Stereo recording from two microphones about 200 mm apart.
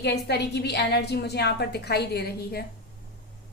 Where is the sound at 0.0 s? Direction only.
55° left (ahead or behind).